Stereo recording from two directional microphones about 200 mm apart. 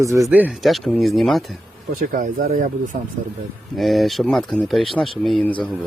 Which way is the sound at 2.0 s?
45° right (ahead or behind).